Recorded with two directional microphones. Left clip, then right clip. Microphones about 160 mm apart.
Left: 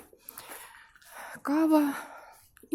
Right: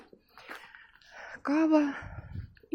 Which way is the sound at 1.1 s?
20° left (ahead or behind).